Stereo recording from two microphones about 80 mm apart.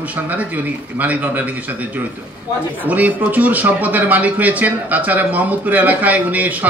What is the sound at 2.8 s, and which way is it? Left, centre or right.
A man's voice, right.